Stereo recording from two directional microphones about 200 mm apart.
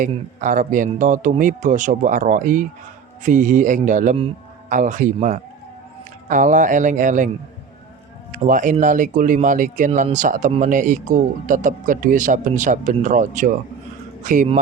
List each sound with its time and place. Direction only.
0.3 s speech: 40° right (ahead or behind)
8.4 s speech: 40° right (ahead or behind)